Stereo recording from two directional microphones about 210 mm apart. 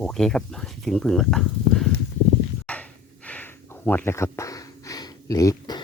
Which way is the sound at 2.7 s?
5° left (ahead or behind).